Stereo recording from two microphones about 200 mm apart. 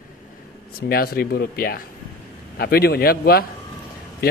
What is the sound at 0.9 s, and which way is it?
A man's voice, 50° left (ahead or behind).